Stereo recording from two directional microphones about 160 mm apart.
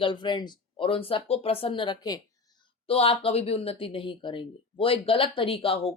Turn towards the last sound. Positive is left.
turn(degrees=35)  # may be behind; listen again after turning